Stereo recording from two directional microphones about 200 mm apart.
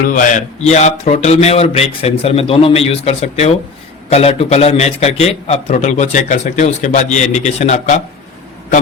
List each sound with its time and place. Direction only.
0.1 s a man's voice: 40° left (ahead or behind)